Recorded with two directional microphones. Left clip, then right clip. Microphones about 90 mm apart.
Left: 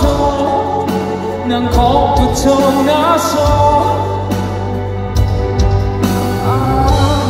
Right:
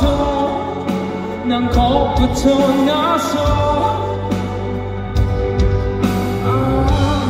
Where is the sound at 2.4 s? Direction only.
30° left (ahead or behind).